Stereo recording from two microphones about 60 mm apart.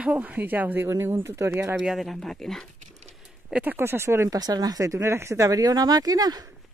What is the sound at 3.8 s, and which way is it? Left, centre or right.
Speech, right.